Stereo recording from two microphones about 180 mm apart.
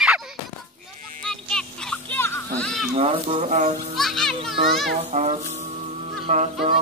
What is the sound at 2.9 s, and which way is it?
Music, 30° right (ahead or behind).